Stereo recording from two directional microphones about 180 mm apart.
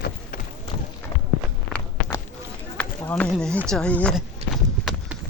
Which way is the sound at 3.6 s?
5° left (ahead or behind).